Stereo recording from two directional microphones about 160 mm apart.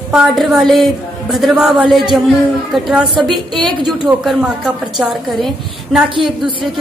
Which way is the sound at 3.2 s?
Centre (ahead or behind).